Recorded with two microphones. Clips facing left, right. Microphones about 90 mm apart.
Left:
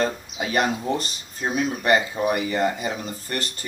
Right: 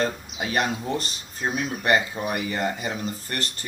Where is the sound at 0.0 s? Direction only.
20° left (ahead or behind).